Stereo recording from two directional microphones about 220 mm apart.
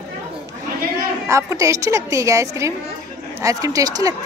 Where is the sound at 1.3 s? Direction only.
15° right (ahead or behind).